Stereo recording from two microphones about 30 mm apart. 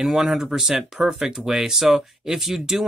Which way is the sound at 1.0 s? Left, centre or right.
Right.